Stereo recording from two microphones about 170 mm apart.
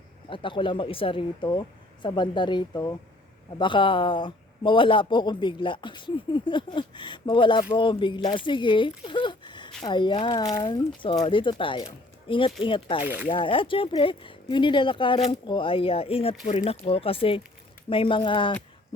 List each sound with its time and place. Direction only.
0.3 s speech: 30° left (ahead or behind)